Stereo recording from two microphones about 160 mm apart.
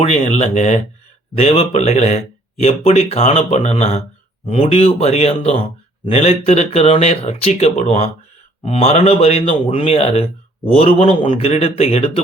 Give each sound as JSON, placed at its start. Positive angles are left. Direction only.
{"t": 0.0, "sound": "speech", "side_deg": 40}